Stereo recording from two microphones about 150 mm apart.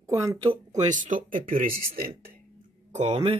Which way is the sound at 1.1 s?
65° right (ahead or behind).